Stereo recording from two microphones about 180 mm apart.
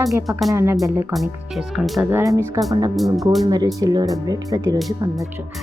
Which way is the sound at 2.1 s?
15° right (ahead or behind).